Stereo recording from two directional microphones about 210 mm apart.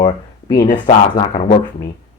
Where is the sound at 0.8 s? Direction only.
35° left (ahead or behind).